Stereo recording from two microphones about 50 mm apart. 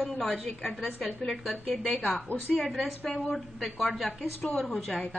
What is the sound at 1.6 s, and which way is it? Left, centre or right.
Speech, centre.